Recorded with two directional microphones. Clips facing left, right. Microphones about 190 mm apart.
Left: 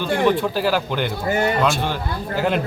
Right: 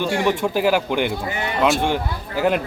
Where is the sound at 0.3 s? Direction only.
15° right (ahead or behind).